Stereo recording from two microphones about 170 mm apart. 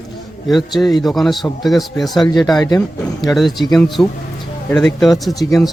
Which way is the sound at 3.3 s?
Centre (ahead or behind).